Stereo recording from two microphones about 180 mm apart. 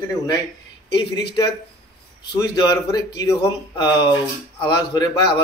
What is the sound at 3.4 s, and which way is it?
Speech, 25° left (ahead or behind).